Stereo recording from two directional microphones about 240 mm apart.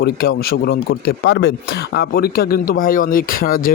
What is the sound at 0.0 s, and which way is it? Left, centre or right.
Speech, left.